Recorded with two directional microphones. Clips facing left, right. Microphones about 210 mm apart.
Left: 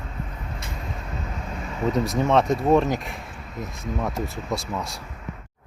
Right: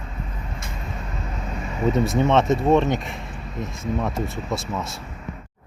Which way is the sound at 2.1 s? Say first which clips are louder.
Even; centre (ahead or behind).